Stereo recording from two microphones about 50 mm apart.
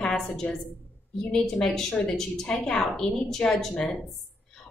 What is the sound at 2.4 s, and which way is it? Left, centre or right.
A woman's voice, left.